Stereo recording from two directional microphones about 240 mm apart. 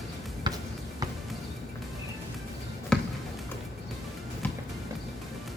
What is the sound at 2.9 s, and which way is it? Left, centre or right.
Basketball bounce, centre.